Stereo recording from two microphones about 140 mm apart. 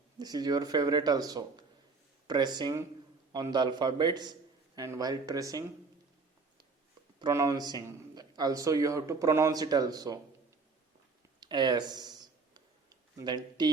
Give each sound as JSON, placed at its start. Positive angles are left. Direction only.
{"t": 0.2, "sound": "a man's voice", "side_deg": -30}
{"t": 7.2, "sound": "a man's voice", "side_deg": -25}
{"t": 11.3, "sound": "speech", "side_deg": -30}
{"t": 12.5, "sound": "tick", "side_deg": -30}